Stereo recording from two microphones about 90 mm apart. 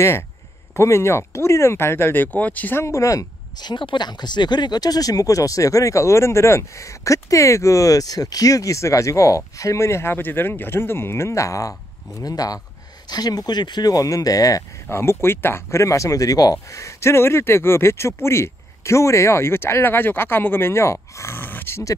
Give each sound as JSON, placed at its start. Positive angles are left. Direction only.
{"t": 0.7, "sound": "speech", "side_deg": 30}
{"t": 2.8, "sound": "speech", "side_deg": 35}
{"t": 3.5, "sound": "speech", "side_deg": 55}
{"t": 14.9, "sound": "speech", "side_deg": 30}
{"t": 16.7, "sound": "speech", "side_deg": 35}